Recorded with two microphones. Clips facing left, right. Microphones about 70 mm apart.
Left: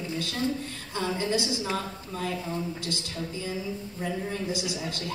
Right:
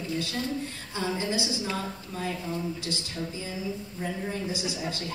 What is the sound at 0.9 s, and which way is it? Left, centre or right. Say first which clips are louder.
Speech: left 2 dB; centre.